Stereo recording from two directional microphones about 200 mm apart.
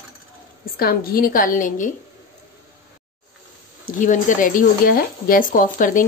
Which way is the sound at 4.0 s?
40° left (ahead or behind).